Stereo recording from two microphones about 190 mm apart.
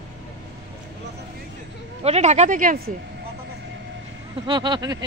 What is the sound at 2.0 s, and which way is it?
Speech, 35° right (ahead or behind).